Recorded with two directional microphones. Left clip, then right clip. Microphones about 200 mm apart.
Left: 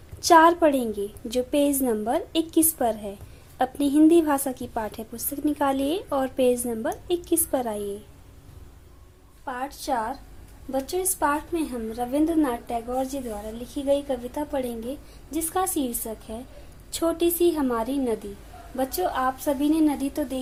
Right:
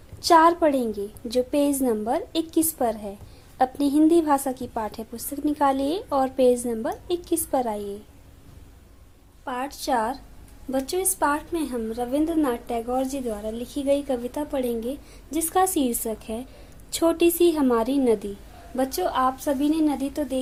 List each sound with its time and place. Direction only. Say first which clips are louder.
0.2 s a woman's voice: left 1 dB; 5° right (ahead or behind)
9.4 s a woman's voice: right 2 dB; 30° right (ahead or behind); by 20.4 s 5° right (ahead or behind)